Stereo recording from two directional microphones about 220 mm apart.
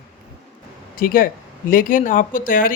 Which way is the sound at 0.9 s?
40° left (ahead or behind).